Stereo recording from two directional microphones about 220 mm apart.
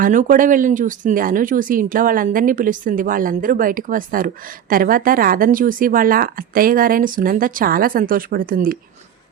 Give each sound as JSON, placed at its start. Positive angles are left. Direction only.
{"t": 0.0, "sound": "speech", "side_deg": -35}